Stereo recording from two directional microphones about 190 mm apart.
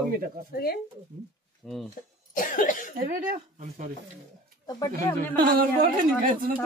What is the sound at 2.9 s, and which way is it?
Speech, 45° right (ahead or behind).